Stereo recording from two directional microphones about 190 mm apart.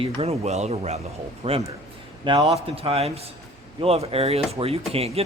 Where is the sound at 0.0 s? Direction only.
35° right (ahead or behind).